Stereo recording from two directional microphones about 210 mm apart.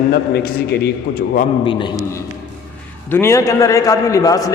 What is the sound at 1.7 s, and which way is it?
Speech, 25° left (ahead or behind).